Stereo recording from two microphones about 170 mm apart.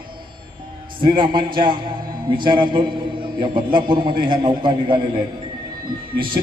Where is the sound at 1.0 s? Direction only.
25° right (ahead or behind).